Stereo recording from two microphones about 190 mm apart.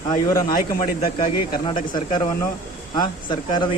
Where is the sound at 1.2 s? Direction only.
25° left (ahead or behind).